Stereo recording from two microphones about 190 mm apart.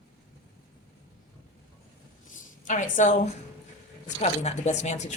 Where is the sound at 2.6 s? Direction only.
40° left (ahead or behind).